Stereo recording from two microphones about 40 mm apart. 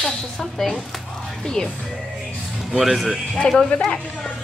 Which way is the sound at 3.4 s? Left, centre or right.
Left.